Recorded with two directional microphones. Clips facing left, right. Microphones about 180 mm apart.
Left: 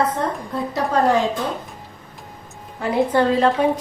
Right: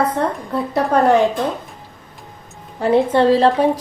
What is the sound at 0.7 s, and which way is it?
Speech, 60° right (ahead or behind).